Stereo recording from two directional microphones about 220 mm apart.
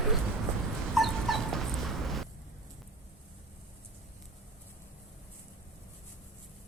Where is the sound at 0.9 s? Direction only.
Centre (ahead or behind).